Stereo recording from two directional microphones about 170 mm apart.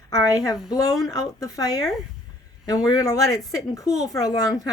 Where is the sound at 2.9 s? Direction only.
20° left (ahead or behind).